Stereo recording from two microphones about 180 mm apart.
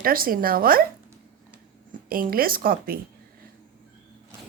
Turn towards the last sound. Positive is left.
turn(degrees=-55)  # may be behind; listen again after turning